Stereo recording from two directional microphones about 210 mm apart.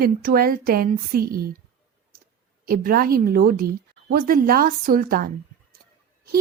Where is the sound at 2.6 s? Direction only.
45° right (ahead or behind).